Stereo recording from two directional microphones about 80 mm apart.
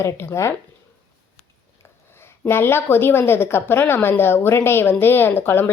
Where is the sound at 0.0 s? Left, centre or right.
Left.